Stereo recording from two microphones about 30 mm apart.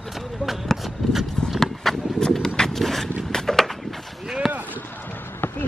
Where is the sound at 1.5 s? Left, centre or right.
Centre.